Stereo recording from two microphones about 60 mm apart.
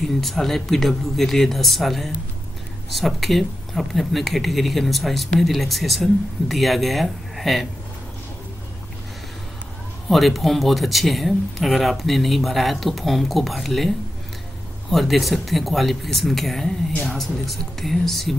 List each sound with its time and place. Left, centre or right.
0.2 s speech: centre
10.0 s speech: centre